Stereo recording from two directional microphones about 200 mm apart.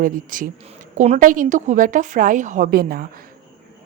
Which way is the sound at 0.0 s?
40° right (ahead or behind).